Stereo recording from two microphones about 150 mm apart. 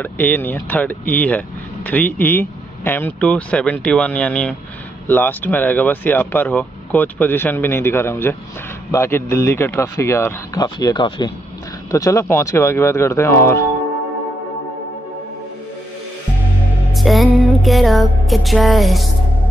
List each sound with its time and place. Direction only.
0.0 s a man's voice: 10° left (ahead or behind); by 11.3 s 30° left (ahead or behind)
11.9 s a man's voice: 20° left (ahead or behind)
16.9 s music: centre (ahead or behind)